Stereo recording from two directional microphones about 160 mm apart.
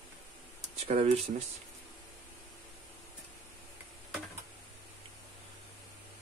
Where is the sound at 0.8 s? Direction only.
45° right (ahead or behind).